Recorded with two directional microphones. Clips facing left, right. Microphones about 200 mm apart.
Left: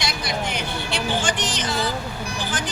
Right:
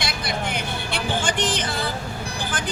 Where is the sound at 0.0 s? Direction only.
55° right (ahead or behind).